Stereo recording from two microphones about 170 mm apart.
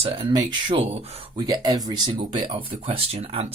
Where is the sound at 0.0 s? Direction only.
30° right (ahead or behind).